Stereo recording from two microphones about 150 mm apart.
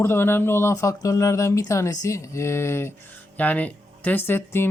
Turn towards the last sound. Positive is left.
turn(degrees=15)  # may be behind; listen again after turning